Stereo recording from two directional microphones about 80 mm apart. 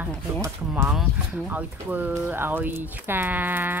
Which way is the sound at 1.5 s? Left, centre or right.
Right.